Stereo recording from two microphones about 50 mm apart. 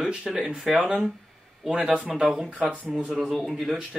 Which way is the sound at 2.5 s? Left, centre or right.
Right.